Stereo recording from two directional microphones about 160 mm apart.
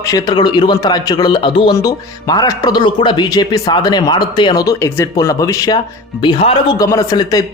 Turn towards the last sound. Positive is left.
turn(degrees=20)  # may be behind; listen again after turning